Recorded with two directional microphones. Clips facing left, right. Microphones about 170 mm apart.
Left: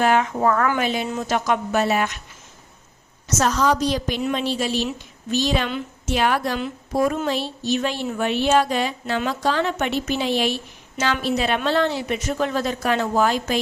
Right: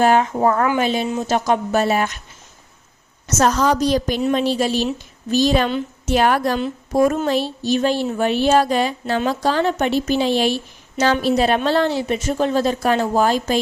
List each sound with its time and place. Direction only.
0.0 s a woman's voice: 35° right (ahead or behind)
0.3 s a woman's voice: 25° right (ahead or behind)
3.2 s a woman's voice: 45° right (ahead or behind)